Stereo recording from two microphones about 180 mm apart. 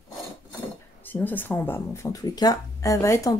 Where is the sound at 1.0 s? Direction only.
10° left (ahead or behind).